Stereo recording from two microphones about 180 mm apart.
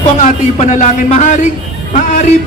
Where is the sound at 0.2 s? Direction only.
45° left (ahead or behind).